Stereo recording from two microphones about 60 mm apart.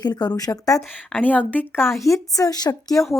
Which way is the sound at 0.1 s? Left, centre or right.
Left.